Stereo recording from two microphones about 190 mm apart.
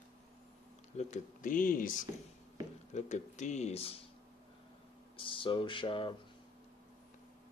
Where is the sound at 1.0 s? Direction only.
40° left (ahead or behind).